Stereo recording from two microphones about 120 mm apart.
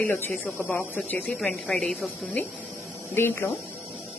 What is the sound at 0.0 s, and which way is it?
Speech, 15° left (ahead or behind).